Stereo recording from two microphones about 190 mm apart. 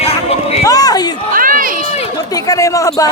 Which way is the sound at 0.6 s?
20° left (ahead or behind).